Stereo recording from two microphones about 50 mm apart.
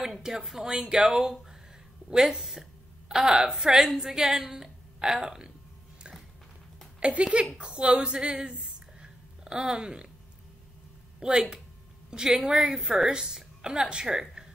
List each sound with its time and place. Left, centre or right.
0.0 s a woman's voice: centre
7.0 s a woman's voice: right
8.7 s a sound: centre
11.1 s a woman's voice: centre